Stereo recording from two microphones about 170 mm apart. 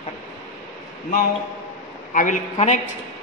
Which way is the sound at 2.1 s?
50° left (ahead or behind).